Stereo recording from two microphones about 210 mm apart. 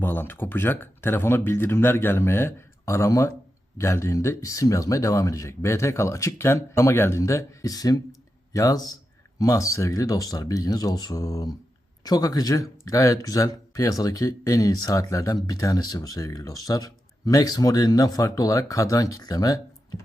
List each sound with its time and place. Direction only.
0.0 s speech: 10° left (ahead or behind)